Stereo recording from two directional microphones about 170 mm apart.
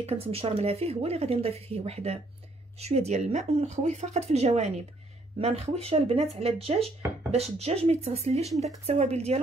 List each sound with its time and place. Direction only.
0.0 s speech: 35° right (ahead or behind)